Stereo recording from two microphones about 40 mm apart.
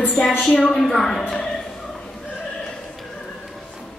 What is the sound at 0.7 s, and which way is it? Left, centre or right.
Speech, centre.